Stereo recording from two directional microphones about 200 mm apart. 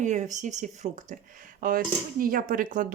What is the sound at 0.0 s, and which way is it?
Speech, 35° right (ahead or behind).